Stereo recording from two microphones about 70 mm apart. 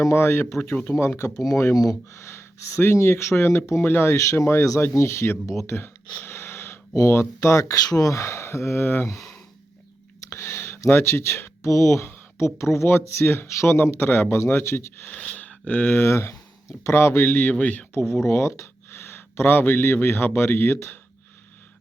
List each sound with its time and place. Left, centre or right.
0.0 s speech: left
1.7 s speech: left
2.2 s speech: left
6.1 s gasp: left
6.9 s speech: left
10.2 s a sound: left
10.8 s speech: left
15.0 s speech: left
16.0 s speech: left
17.2 s speech: left